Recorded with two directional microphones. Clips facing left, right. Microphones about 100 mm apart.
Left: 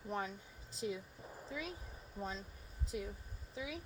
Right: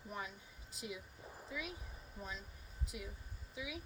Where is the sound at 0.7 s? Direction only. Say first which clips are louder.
Left 6 dB; 35° left (ahead or behind).